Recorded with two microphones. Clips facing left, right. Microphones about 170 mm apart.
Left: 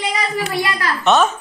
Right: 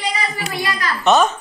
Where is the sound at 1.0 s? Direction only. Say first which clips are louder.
Right 1 dB; centre (ahead or behind).